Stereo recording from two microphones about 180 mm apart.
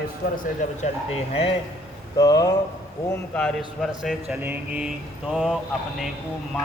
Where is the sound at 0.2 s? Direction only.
60° left (ahead or behind).